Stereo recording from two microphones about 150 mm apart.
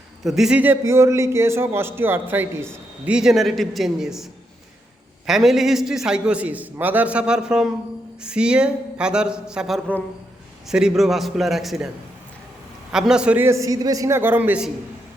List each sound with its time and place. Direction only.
0.3 s a man's voice: 5° right (ahead or behind)
3.2 s a man's voice: centre (ahead or behind)
12.9 s a man's voice: 5° right (ahead or behind)